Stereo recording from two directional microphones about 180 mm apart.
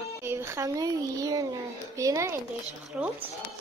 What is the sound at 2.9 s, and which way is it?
Speech, 5° right (ahead or behind).